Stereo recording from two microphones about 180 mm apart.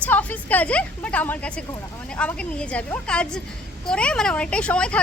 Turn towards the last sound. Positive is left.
turn(degrees=5)  # may be behind; listen again after turning